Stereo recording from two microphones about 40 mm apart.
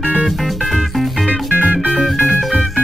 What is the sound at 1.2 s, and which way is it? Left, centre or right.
Music, right.